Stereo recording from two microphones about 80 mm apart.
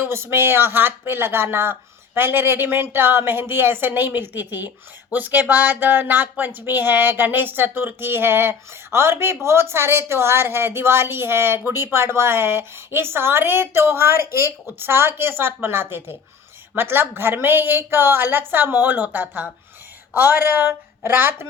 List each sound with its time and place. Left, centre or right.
0.0 s speech: right